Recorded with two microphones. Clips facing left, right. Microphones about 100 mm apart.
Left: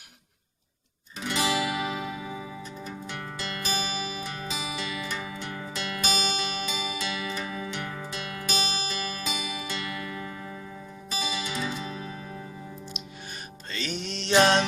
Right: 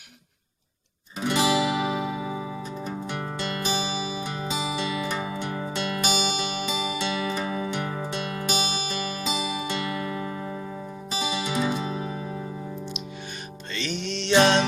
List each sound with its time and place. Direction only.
1.2 s music: 25° right (ahead or behind)
2.3 s music: 25° right (ahead or behind)
13.7 s music: 40° left (ahead or behind)